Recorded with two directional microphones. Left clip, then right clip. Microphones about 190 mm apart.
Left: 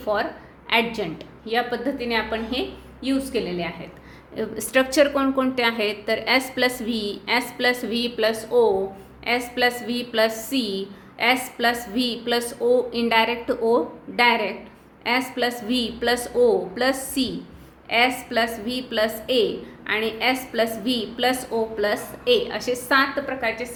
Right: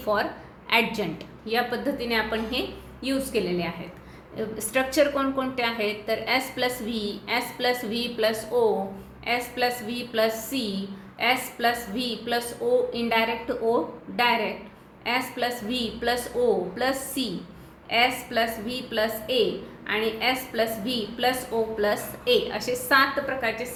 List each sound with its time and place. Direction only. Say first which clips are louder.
0.0 s a woman's voice: left 1 dB; 15° left (ahead or behind)
4.4 s a woman's voice: left 5 dB; 30° left (ahead or behind)